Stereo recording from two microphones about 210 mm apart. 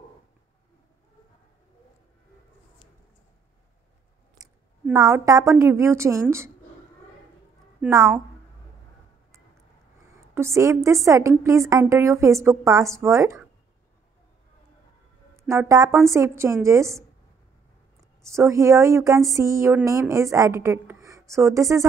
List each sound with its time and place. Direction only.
4.9 s speech: 15° right (ahead or behind)
7.8 s a woman's voice: 15° right (ahead or behind)
10.3 s speech: 15° right (ahead or behind)
15.3 s speech: 15° right (ahead or behind)
18.2 s speech: 15° right (ahead or behind)